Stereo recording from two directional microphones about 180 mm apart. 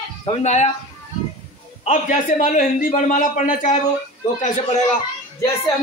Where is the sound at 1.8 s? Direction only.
40° left (ahead or behind).